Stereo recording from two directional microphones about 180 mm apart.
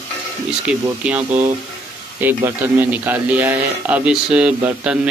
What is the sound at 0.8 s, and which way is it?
A woman's voice, 10° right (ahead or behind).